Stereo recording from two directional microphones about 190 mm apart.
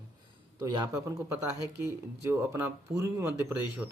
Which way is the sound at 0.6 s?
15° right (ahead or behind).